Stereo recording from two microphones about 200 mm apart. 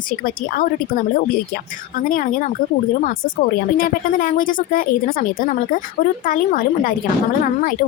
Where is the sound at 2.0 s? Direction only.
45° left (ahead or behind).